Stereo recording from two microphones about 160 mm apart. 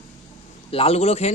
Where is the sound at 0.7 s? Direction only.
40° left (ahead or behind).